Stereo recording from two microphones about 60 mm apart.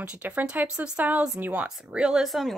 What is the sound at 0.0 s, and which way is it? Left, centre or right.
Speech, centre.